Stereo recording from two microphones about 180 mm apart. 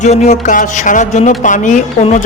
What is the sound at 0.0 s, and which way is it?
A woman's voice, 40° left (ahead or behind).